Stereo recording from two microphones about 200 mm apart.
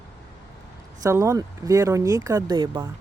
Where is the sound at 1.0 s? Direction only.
15° right (ahead or behind).